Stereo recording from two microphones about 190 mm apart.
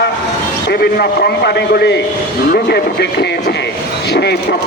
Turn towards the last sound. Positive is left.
turn(degrees=60)  # may be behind; listen again after turning